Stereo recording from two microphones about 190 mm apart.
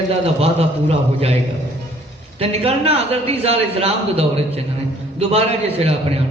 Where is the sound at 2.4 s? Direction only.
30° right (ahead or behind).